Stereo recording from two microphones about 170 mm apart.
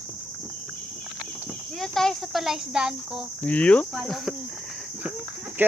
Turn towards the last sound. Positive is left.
turn(degrees=-10)  # may be behind; listen again after turning